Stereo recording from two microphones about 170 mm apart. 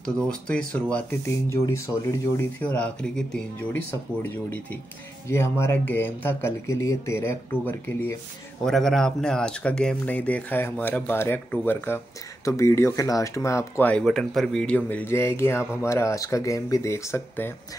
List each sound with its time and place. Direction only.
0.0 s speech: 5° left (ahead or behind)
2.6 s speech: 5° left (ahead or behind)
8.6 s speech: 5° left (ahead or behind)